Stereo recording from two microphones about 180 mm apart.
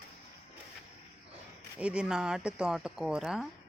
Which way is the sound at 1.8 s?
5° right (ahead or behind).